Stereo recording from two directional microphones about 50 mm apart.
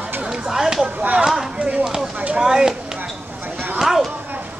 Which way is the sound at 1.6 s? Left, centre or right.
Right.